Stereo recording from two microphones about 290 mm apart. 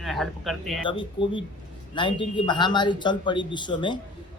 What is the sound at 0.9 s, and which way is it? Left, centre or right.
Speech, centre.